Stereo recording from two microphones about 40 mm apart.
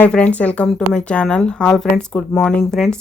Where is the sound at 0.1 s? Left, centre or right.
Left.